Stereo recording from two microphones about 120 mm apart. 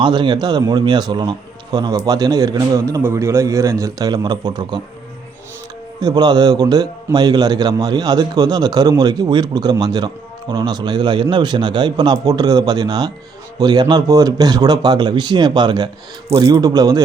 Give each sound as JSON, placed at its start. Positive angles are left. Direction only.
{"t": 0.0, "sound": "a man's voice", "side_deg": -40}
{"t": 6.0, "sound": "a man's voice", "side_deg": -35}